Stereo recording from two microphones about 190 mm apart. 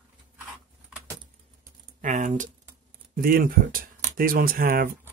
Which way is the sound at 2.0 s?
40° right (ahead or behind).